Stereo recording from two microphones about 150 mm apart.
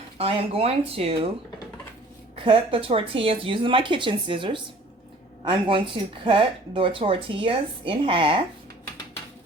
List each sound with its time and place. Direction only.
0.2 s speech: 40° right (ahead or behind)
2.4 s speech: 35° right (ahead or behind)